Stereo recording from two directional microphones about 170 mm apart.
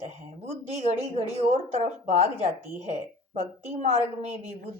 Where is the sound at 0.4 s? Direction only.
40° right (ahead or behind).